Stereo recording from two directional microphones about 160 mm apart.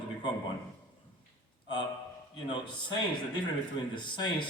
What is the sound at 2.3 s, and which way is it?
A man's voice, 30° left (ahead or behind).